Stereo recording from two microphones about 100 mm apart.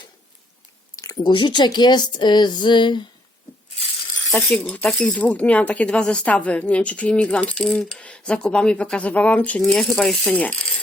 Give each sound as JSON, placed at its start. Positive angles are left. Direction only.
{"t": 0.9, "sound": "a sound", "side_deg": 35}
{"t": 1.2, "sound": "speech", "side_deg": 55}
{"t": 4.5, "sound": "speech", "side_deg": 10}
{"t": 10.3, "sound": "speech", "side_deg": 15}